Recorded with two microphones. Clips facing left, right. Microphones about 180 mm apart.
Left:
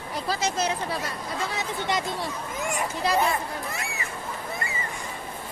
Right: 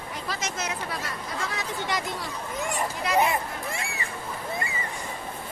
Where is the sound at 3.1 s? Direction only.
30° left (ahead or behind).